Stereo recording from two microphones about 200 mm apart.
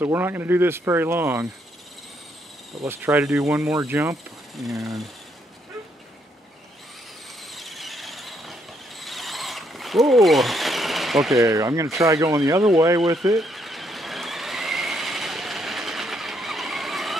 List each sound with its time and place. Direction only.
0.0 s speech: 10° right (ahead or behind)
2.8 s speech: 10° right (ahead or behind)
4.6 s speech: centre (ahead or behind)
7.5 s squeal: centre (ahead or behind)
9.0 s a sound: centre (ahead or behind)
11.3 s speech: 15° right (ahead or behind)
13.4 s vehicle: centre (ahead or behind)